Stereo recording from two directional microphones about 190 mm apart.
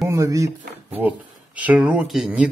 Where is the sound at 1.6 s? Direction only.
5° right (ahead or behind).